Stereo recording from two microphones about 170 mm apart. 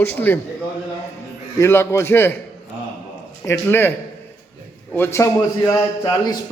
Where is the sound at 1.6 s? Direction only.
15° left (ahead or behind).